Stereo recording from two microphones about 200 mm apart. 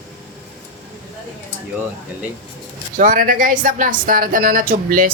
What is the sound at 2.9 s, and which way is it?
Speech, 45° right (ahead or behind).